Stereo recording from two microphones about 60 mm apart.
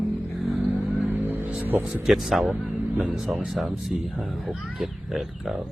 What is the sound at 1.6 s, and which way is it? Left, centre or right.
Speech, right.